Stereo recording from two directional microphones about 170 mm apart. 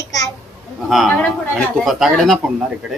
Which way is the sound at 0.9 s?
Centre (ahead or behind).